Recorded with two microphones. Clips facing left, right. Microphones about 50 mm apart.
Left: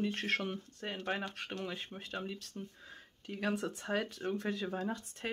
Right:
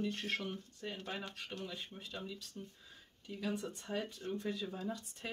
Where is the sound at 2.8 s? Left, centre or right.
Left.